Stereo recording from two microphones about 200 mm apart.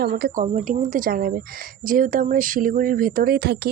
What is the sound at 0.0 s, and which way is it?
Speech, 50° right (ahead or behind).